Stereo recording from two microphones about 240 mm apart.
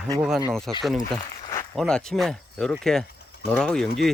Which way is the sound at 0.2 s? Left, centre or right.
Centre.